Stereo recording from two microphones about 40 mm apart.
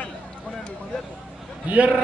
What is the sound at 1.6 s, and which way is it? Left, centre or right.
Speech, right.